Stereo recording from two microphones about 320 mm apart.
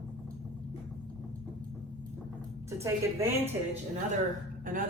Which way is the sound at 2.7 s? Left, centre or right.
Centre.